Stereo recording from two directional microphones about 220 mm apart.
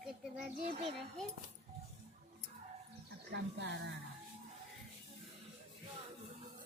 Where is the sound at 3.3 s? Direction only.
55° right (ahead or behind).